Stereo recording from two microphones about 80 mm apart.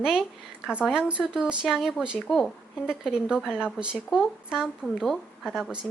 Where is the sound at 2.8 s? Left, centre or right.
Centre.